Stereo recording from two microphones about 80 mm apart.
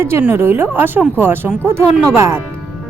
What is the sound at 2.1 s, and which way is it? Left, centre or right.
Speech, right.